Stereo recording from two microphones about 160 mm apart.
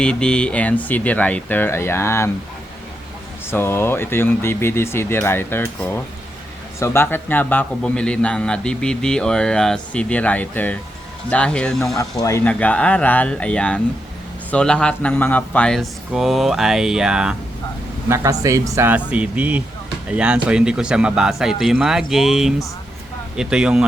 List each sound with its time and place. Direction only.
0.0 s a man's voice: 5° left (ahead or behind)
3.5 s a man's voice: 15° left (ahead or behind)
12.2 s a man's voice: 15° left (ahead or behind); by 17.3 s 5° right (ahead or behind)
18.1 s speech: 20° right (ahead or behind)